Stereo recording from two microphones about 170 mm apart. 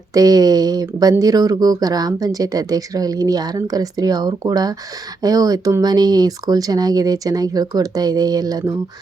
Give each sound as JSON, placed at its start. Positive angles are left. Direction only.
{"t": 0.1, "sound": "speech", "side_deg": -20}